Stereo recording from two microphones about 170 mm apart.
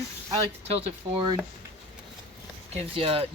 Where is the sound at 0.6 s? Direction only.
35° right (ahead or behind).